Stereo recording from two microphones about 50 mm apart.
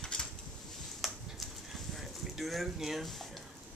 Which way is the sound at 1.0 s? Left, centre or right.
Centre.